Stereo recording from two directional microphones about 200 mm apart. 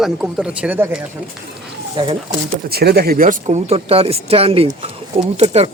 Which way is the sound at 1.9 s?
25° right (ahead or behind).